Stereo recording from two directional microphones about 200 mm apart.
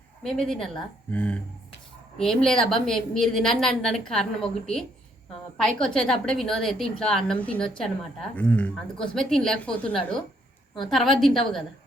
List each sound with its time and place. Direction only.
0.2 s a woman's voice: 5° left (ahead or behind)